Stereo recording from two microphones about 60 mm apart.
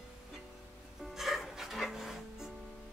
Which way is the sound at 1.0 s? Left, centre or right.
Centre.